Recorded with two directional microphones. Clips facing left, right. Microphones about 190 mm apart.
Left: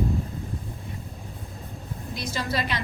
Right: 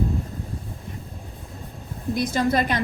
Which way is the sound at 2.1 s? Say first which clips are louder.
Right 8 dB; 50° right (ahead or behind).